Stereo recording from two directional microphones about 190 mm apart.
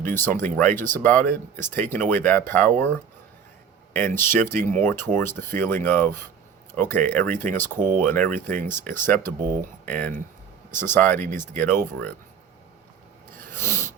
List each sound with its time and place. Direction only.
0.0 s speech: 10° left (ahead or behind)
1.1 s speech: 45° right (ahead or behind)
1.5 s speech: 10° left (ahead or behind)
9.6 s speech: 45° right (ahead or behind)
10.7 s speech: 10° left (ahead or behind)
13.4 s a sound: 10° left (ahead or behind)